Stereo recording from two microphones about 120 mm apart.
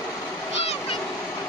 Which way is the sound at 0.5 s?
55° left (ahead or behind).